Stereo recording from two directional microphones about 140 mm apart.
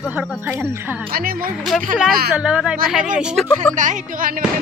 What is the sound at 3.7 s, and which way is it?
Speech, 65° right (ahead or behind).